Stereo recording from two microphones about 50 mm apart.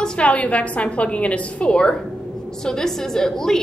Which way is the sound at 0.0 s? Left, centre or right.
Left.